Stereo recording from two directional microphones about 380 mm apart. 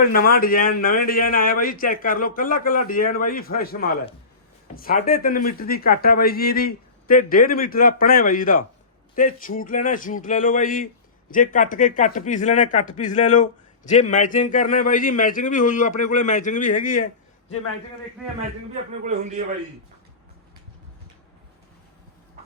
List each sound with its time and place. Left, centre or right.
0.0 s speech: left
19.0 s a man's voice: centre